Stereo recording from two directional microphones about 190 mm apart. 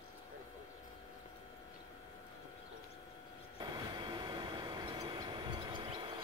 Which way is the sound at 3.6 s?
25° right (ahead or behind).